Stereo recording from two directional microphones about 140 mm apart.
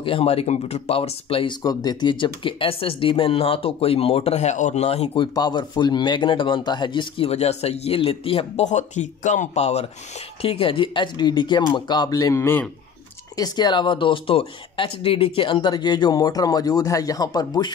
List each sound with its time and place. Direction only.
0.0 s speech: 40° left (ahead or behind)
1.6 s speech: 25° left (ahead or behind); by 5.2 s 50° left (ahead or behind)
5.2 s speech: 30° left (ahead or behind)
8.6 s speech: 60° left (ahead or behind); by 12.6 s 15° left (ahead or behind)
13.4 s speech: 30° left (ahead or behind)